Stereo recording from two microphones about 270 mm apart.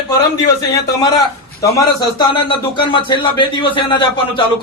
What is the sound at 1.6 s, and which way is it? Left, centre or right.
A man's voice, centre.